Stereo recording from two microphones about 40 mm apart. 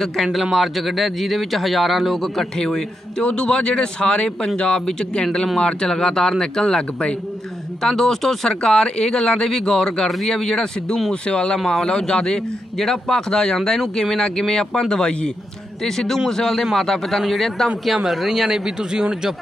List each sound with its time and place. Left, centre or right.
0.0 s a man's voice: centre
2.5 s speech: centre
7.8 s speech: centre
12.7 s a man's voice: centre